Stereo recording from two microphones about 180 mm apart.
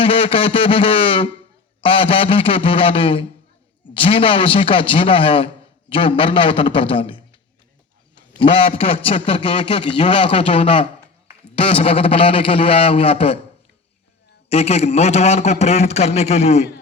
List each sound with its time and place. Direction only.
0.0 s a man's voice: 30° left (ahead or behind)
8.4 s a man's voice: 30° left (ahead or behind)
14.5 s a man's voice: 35° left (ahead or behind)